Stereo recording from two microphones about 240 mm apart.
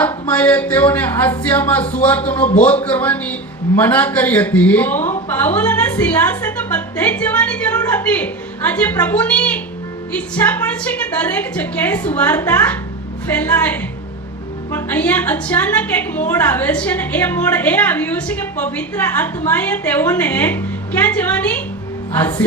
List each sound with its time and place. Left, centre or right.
0.0 s a woman's voice: centre
2.3 s speech: left
2.6 s a woman's voice: centre